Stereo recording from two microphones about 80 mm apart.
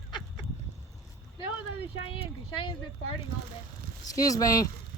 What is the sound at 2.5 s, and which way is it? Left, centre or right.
Speech, left.